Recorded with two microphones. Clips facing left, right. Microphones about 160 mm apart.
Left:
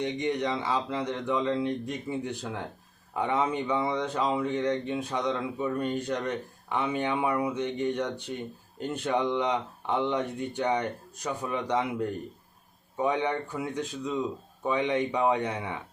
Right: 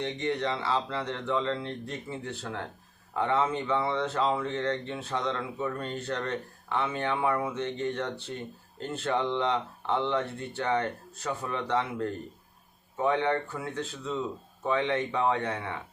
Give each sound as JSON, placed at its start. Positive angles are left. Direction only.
{"t": 0.0, "sound": "speech", "side_deg": 15}